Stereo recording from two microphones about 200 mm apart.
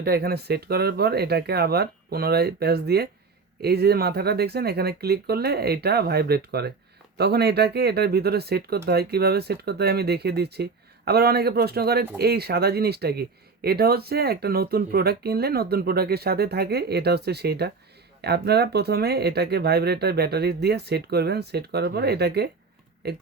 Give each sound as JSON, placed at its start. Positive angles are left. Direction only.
{"t": 0.0, "sound": "speech", "side_deg": -50}